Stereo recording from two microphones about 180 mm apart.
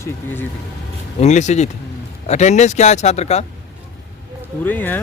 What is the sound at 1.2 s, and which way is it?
Speech, 40° left (ahead or behind).